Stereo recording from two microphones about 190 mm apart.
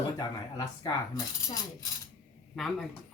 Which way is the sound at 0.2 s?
20° left (ahead or behind).